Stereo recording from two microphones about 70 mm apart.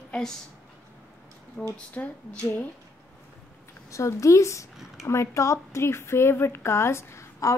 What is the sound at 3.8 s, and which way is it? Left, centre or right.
A woman's voice, left.